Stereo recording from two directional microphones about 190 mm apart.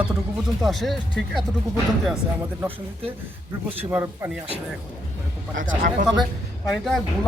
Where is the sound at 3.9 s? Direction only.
10° right (ahead or behind).